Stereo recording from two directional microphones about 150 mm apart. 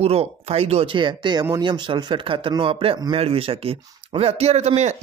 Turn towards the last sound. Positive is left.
turn(degrees=-50)  # may be behind; listen again after turning